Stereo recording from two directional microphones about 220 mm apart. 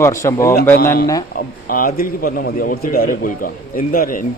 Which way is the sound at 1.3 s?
40° left (ahead or behind).